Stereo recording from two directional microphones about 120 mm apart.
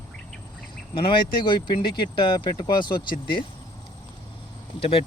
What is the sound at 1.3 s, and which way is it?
Speech, 40° left (ahead or behind).